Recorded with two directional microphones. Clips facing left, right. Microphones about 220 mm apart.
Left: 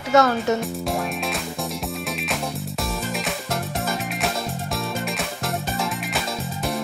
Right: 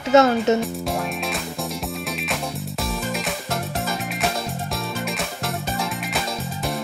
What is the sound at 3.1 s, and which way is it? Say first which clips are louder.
Music: even; centre (ahead or behind).